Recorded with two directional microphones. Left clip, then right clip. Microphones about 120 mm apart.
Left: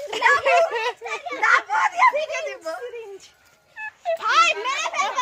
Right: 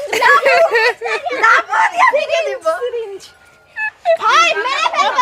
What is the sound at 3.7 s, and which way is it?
Music, 35° right (ahead or behind).